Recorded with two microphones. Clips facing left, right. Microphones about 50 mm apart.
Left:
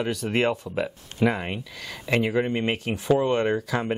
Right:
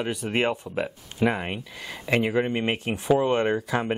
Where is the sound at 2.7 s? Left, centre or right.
Right.